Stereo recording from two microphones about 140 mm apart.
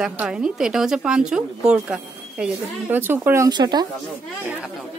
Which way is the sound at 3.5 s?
30° right (ahead or behind).